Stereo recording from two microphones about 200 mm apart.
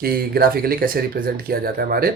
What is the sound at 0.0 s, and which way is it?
Speech, 50° right (ahead or behind).